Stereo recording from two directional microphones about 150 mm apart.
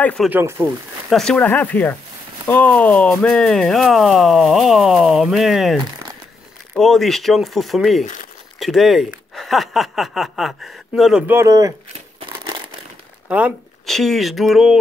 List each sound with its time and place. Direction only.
0.0 s speech: 5° left (ahead or behind)
0.3 s speech: 15° right (ahead or behind)
1.1 s speech: 5° left (ahead or behind)
6.8 s speech: centre (ahead or behind)
8.0 s speech: 60° left (ahead or behind)
8.5 s speech: centre (ahead or behind)
11.2 s speech: 20° right (ahead or behind)
13.8 s speech: centre (ahead or behind)